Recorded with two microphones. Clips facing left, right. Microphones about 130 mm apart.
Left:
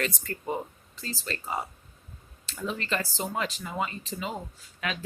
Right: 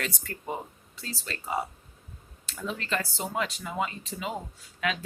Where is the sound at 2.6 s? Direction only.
Centre (ahead or behind).